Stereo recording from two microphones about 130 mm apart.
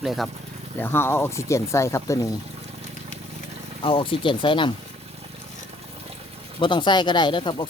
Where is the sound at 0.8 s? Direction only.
20° left (ahead or behind).